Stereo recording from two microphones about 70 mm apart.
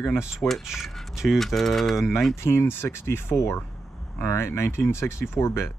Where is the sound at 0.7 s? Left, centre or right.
Centre.